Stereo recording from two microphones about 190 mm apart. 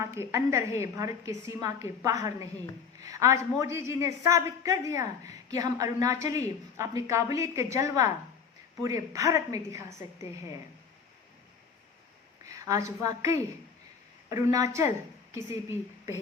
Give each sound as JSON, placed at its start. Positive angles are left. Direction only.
{"t": 0.0, "sound": "a woman's voice", "side_deg": -15}
{"t": 12.5, "sound": "a woman's voice", "side_deg": -15}